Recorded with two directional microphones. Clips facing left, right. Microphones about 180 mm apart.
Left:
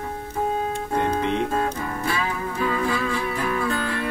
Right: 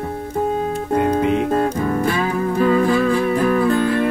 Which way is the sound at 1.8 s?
40° right (ahead or behind).